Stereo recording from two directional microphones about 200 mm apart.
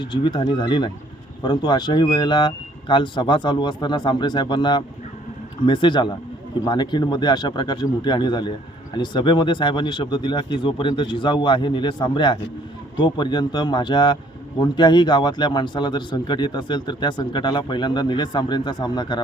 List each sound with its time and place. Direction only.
0.0 s a man's voice: 20° left (ahead or behind)